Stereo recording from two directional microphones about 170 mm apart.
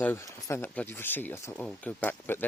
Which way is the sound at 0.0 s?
15° left (ahead or behind).